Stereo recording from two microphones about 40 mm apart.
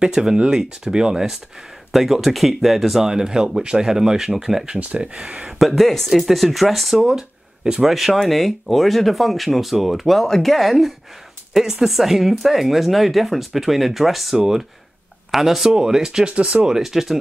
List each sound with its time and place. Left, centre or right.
0.0 s speech: centre
1.9 s speech: centre
4.7 s speech: right
5.6 s speech: centre
7.1 s a sound: centre
7.9 s speech: centre
16.3 s speech: right
16.6 s speech: centre